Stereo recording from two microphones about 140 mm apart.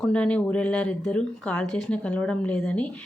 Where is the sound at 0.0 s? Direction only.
10° left (ahead or behind).